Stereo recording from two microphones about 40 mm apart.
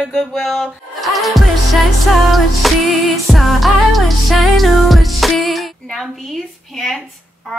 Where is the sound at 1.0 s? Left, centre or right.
Centre.